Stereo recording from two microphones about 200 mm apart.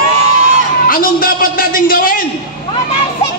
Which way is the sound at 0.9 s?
45° left (ahead or behind).